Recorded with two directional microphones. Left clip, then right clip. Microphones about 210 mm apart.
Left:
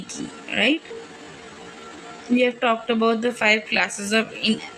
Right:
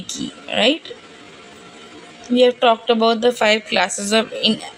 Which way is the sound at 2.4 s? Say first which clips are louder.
Right 7 dB; 30° right (ahead or behind).